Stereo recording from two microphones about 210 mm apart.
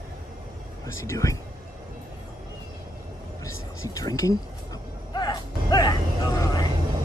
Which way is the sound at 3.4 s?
15° left (ahead or behind).